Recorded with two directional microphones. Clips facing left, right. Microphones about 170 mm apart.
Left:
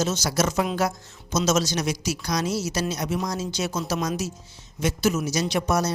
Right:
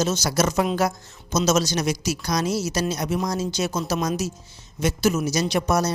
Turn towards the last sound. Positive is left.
turn(degrees=-40)  # may be behind; listen again after turning